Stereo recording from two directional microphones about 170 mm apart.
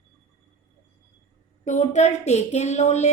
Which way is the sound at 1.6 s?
45° left (ahead or behind).